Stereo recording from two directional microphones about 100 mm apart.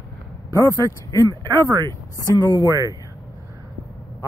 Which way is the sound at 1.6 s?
40° right (ahead or behind).